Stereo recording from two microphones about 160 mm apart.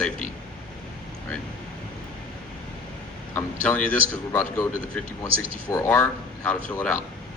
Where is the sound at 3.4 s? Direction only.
10° left (ahead or behind).